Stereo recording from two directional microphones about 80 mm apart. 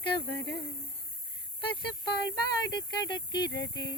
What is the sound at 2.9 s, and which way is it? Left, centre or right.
Speech, left.